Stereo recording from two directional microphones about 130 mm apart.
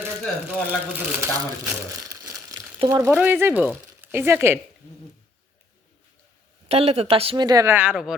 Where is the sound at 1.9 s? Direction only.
25° right (ahead or behind).